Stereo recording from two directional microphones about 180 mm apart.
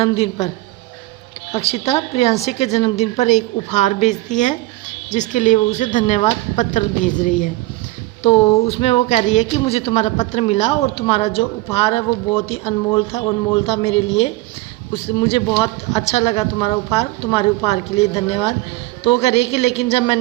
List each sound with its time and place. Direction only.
0.0 s speech: 30° left (ahead or behind)
1.5 s speech: 35° left (ahead or behind)